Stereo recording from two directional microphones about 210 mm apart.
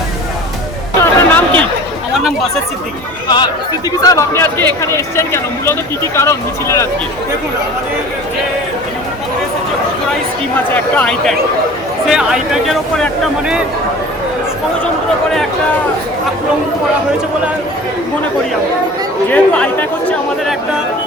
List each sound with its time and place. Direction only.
0.9 s a sound: 10° left (ahead or behind)
3.2 s speech: 20° left (ahead or behind)
10.8 s speech: 5° left (ahead or behind)
19.3 s speech: 5° left (ahead or behind)